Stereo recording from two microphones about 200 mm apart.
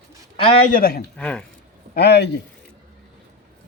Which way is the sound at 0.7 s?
45° left (ahead or behind).